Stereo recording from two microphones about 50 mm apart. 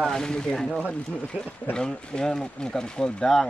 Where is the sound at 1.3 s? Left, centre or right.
Right.